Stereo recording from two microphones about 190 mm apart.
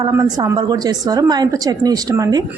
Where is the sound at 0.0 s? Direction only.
20° right (ahead or behind).